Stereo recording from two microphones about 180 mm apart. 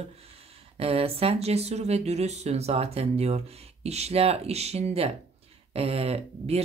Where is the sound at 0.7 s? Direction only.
35° right (ahead or behind).